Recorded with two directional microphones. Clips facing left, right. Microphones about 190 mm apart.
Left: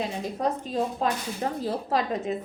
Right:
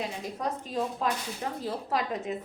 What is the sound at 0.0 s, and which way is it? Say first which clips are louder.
A woman's voice: left 5 dB; 30° left (ahead or behind).